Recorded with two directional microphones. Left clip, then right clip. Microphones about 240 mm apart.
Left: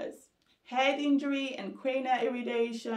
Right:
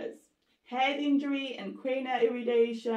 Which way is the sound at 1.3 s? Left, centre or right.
Centre.